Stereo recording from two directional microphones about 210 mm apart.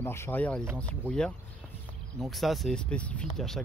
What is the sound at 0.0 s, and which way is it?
Speech, 10° left (ahead or behind).